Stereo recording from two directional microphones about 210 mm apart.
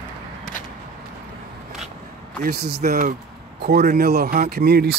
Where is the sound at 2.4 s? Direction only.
50° right (ahead or behind).